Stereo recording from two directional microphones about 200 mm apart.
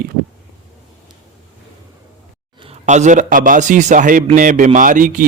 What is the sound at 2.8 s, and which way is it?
A man's voice, 35° right (ahead or behind).